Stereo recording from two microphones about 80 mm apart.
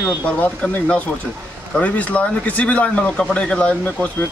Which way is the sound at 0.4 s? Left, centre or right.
Centre.